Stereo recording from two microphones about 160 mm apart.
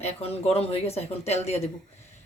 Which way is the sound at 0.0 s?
40° left (ahead or behind).